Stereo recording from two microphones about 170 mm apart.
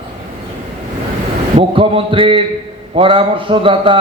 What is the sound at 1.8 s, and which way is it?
A man's voice, 30° right (ahead or behind).